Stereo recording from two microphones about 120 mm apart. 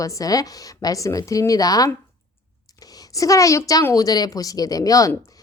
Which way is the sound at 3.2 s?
30° left (ahead or behind).